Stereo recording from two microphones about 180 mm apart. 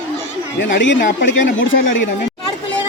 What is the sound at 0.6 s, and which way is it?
Speech, 85° left.